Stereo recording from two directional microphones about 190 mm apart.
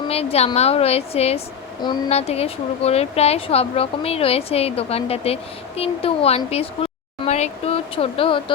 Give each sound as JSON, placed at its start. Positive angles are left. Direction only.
{"t": 0.1, "sound": "speech", "side_deg": 30}